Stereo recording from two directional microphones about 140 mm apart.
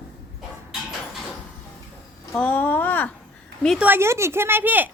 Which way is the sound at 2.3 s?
10° left (ahead or behind).